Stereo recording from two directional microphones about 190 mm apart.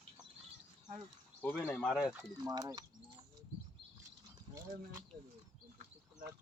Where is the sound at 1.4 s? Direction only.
5° left (ahead or behind).